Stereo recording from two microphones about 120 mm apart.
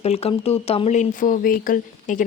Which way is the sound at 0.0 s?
60° left (ahead or behind).